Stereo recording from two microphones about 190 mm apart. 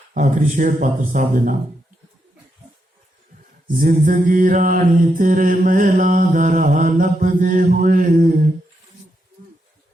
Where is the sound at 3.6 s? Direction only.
45° right (ahead or behind).